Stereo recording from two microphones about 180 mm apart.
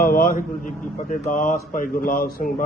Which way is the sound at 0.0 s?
55° left (ahead or behind).